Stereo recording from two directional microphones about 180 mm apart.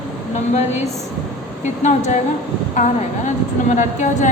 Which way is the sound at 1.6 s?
40° left (ahead or behind).